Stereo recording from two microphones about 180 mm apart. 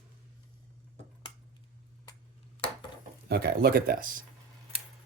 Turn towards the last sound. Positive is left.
turn(degrees=-50)  # may be behind; listen again after turning